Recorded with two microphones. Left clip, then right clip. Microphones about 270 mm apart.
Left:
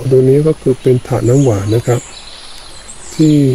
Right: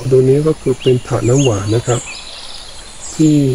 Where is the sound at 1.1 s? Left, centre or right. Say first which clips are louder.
Left 2 dB; left.